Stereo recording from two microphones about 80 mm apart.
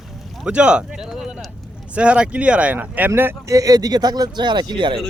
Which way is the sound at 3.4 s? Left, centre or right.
Right.